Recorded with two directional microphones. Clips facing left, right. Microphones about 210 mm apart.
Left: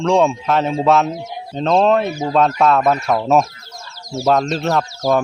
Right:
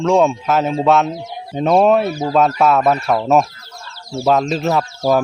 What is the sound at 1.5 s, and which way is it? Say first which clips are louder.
Speech: right 2 dB; 10° right (ahead or behind).